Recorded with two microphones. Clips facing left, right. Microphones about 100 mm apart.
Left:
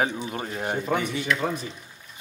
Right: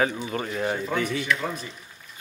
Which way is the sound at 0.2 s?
15° left (ahead or behind).